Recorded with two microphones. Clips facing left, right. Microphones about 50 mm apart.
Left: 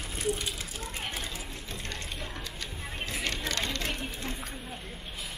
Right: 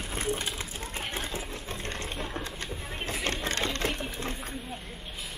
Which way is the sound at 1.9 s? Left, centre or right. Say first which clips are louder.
Right 5 dB; right.